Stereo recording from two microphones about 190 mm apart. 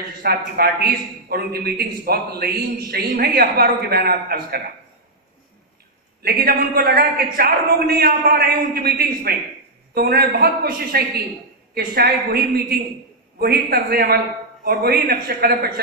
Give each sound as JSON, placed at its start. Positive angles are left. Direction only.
{"t": 0.2, "sound": "a man's voice", "side_deg": -55}
{"t": 6.2, "sound": "a man's voice", "side_deg": -55}